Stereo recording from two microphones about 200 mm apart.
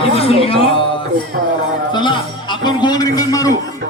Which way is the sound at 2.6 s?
20° left (ahead or behind).